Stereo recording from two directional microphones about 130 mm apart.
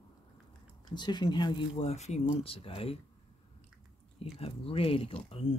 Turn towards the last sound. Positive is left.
turn(degrees=50)  # may be behind; listen again after turning